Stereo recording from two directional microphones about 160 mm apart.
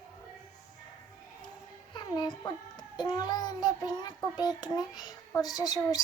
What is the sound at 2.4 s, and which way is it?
Child singing, 25° left (ahead or behind).